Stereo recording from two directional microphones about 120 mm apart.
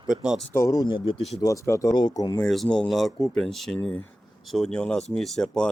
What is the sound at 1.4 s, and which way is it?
Speech, 30° left (ahead or behind).